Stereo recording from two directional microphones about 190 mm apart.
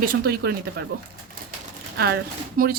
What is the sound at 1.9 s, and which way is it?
Speech, 60° right (ahead or behind).